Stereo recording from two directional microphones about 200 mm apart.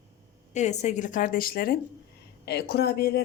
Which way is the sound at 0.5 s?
35° left (ahead or behind).